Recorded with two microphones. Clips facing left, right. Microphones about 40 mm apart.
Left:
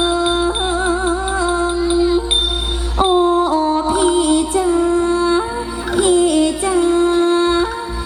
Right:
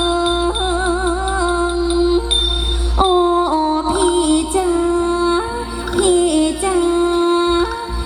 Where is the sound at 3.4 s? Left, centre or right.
Right.